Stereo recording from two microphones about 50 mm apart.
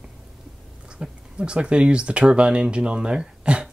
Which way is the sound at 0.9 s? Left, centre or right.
Right.